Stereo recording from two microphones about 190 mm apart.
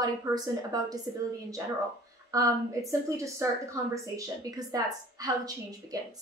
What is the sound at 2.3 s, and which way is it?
A woman's voice, 20° right (ahead or behind).